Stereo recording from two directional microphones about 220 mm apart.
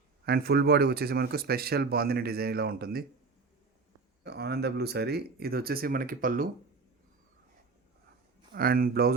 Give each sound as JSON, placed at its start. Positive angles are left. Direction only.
{"t": 0.3, "sound": "speech", "side_deg": -45}
{"t": 4.2, "sound": "speech", "side_deg": -50}
{"t": 8.5, "sound": "speech", "side_deg": -40}